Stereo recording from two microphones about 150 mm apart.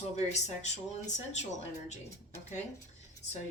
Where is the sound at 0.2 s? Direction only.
50° left (ahead or behind).